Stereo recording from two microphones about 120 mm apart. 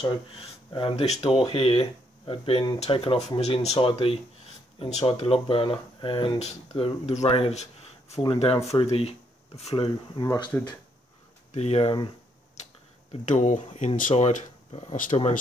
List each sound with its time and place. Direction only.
0.0 s speech: 50° left (ahead or behind)
3.3 s speech: 65° left (ahead or behind)
4.7 s speech: 65° left (ahead or behind)
5.0 s speech: 50° left (ahead or behind)
8.6 s speech: 60° left (ahead or behind)
10.2 s speech: 30° left (ahead or behind)
11.5 s speech: 60° left (ahead or behind)
13.2 s speech: 90° left; by 15.3 s 65° left (ahead or behind)